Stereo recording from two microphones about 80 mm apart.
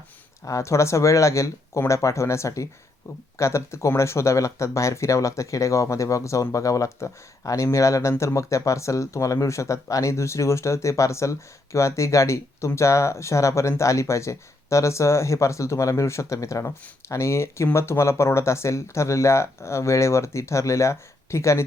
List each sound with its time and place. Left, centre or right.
0.4 s speech: left